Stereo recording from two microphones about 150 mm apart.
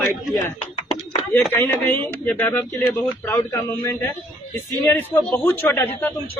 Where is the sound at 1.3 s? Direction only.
15° left (ahead or behind).